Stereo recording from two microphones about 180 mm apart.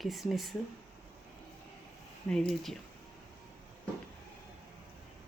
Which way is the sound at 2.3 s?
Centre (ahead or behind).